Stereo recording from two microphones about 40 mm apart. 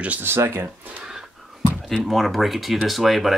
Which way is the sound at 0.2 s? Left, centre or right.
Right.